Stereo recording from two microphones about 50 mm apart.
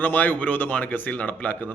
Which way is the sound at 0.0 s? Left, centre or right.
Left.